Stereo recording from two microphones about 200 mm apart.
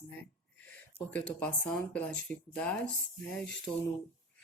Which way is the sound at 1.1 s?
5° left (ahead or behind).